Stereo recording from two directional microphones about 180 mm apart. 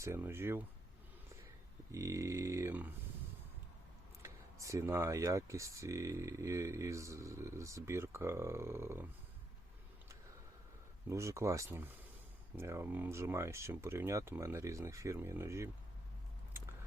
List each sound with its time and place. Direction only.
0.0 s speech: 15° right (ahead or behind)
1.9 s speech: 15° right (ahead or behind)
4.2 s speech: 15° right (ahead or behind)
11.1 s speech: 15° right (ahead or behind)